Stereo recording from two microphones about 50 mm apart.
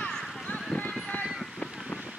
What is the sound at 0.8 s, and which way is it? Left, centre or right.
Clip-clop, left.